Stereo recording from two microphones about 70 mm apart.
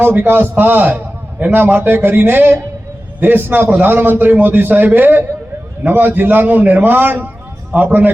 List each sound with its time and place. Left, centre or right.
0.0 s a man's voice: right